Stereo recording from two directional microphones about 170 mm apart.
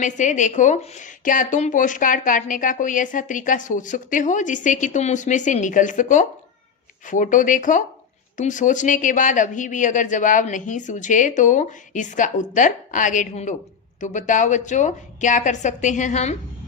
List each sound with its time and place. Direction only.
0.0 s a woman's voice: 45° left (ahead or behind)